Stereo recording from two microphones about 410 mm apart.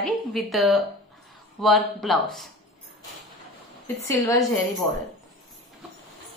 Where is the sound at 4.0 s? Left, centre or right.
Centre.